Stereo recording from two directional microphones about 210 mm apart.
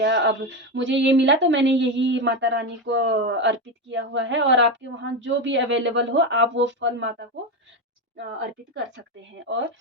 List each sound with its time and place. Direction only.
0.0 s speech: 55° right (ahead or behind)
9.5 s speech: 60° right (ahead or behind)